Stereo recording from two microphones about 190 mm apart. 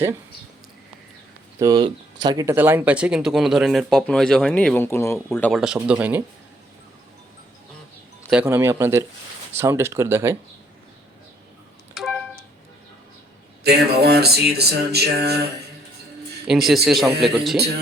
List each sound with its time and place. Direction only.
1.5 s speech: 20° right (ahead or behind); by 5.5 s 15° left (ahead or behind)
5.5 s speech: 5° right (ahead or behind)
8.3 s speech: 10° right (ahead or behind)
11.9 s a sound: centre (ahead or behind)
13.7 s a sound: 55° right (ahead or behind)
16.5 s speech: centre (ahead or behind)